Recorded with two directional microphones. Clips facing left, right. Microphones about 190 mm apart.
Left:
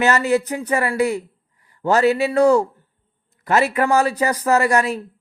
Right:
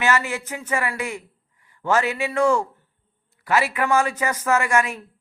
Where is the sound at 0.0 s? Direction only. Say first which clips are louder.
Left 6 dB; 40° left (ahead or behind).